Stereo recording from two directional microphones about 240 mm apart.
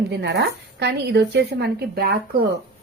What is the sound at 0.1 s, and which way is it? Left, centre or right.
A woman's voice, right.